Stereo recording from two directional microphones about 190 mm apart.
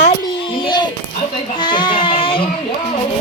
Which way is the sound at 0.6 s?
25° left (ahead or behind).